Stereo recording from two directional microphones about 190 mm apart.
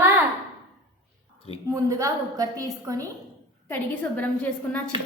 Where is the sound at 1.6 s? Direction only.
15° right (ahead or behind).